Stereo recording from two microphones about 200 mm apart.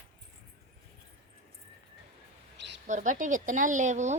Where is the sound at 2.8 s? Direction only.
40° right (ahead or behind).